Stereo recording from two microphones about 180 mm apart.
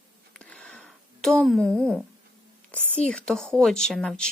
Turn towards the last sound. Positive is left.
turn(degrees=5)  # may be behind; listen again after turning